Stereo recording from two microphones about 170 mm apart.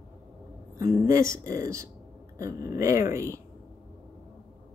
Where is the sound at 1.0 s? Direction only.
20° right (ahead or behind).